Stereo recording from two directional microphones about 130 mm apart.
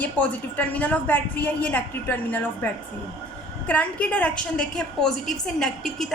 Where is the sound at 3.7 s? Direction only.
10° left (ahead or behind).